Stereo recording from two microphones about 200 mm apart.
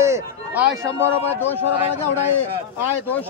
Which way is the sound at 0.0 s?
10° right (ahead or behind).